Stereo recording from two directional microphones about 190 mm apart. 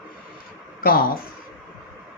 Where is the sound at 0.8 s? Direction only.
50° left (ahead or behind).